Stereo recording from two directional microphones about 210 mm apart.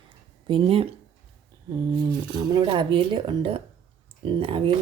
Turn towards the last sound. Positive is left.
turn(degrees=-25)  # may be behind; listen again after turning